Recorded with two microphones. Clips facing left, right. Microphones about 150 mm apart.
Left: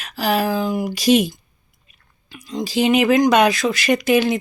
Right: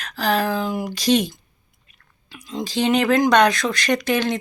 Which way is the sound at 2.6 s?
5° left (ahead or behind).